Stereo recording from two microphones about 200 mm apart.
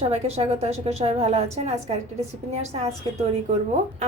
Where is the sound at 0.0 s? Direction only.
30° right (ahead or behind).